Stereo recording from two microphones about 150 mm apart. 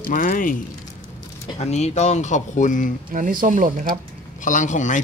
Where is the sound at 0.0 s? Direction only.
65° left (ahead or behind).